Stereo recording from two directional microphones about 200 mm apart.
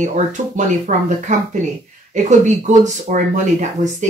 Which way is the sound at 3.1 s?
40° right (ahead or behind).